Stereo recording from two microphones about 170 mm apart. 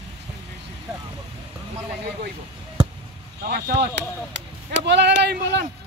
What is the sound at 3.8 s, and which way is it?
Speech, 90° right.